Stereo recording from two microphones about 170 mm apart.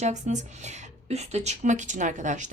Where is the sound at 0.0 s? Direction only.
45° right (ahead or behind).